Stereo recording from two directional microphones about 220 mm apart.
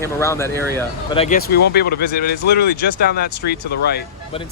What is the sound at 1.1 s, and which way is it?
Speech, 25° left (ahead or behind).